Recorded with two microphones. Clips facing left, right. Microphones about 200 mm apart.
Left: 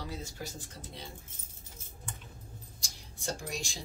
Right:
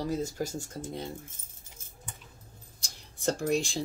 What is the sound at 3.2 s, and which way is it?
Speech, 55° right (ahead or behind).